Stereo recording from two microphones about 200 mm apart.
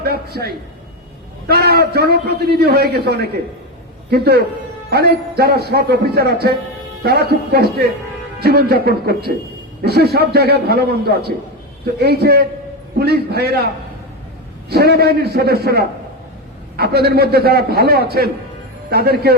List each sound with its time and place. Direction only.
0.0 s a sound: 50° right (ahead or behind)
1.5 s a man's voice: 50° right (ahead or behind)
14.7 s a man's voice: 55° right (ahead or behind)